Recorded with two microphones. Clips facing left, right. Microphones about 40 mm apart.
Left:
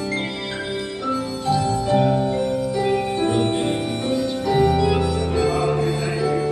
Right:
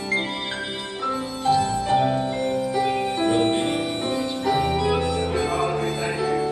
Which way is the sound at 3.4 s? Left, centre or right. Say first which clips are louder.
Even; right.